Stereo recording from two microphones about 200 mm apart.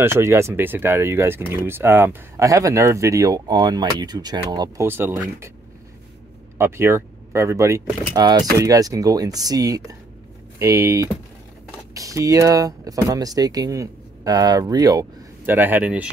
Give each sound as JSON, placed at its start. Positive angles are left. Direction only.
{"t": 0.0, "sound": "speech", "side_deg": -10}
{"t": 6.6, "sound": "speech", "side_deg": -15}